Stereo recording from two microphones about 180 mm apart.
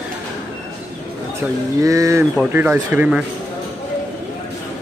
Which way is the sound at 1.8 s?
20° right (ahead or behind).